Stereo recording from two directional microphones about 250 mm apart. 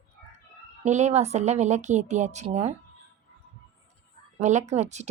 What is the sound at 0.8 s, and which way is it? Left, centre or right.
A woman's voice, right.